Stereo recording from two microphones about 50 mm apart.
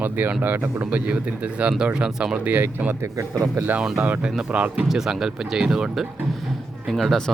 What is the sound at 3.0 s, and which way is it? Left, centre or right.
Speech, right.